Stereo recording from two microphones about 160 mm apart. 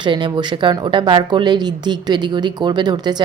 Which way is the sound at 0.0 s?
30° right (ahead or behind).